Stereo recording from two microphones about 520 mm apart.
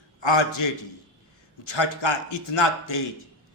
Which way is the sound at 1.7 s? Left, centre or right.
Left.